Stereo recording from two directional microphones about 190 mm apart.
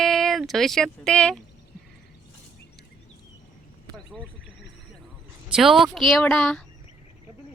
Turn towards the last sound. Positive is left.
turn(degrees=5)  # may be behind; listen again after turning